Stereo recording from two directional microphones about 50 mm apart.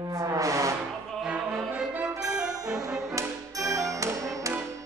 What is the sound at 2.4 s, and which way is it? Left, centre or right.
Brass instrument, centre.